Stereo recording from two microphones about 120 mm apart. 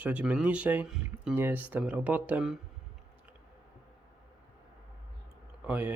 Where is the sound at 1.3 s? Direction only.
15° right (ahead or behind).